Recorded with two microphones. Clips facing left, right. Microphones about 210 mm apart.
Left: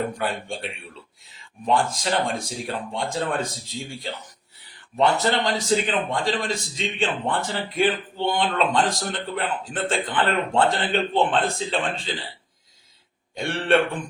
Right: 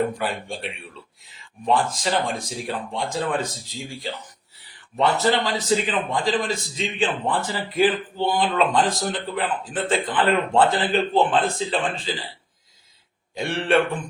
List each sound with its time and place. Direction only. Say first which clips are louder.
0.2 s a man's voice: even; centre (ahead or behind)
13.3 s a man's voice: even; centre (ahead or behind)